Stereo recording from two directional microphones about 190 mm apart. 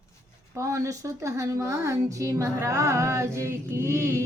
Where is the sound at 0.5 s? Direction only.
15° right (ahead or behind).